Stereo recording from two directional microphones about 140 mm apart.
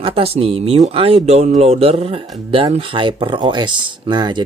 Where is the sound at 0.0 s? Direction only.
45° right (ahead or behind).